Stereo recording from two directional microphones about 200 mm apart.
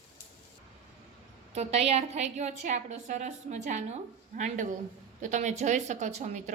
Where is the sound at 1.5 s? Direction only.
30° right (ahead or behind).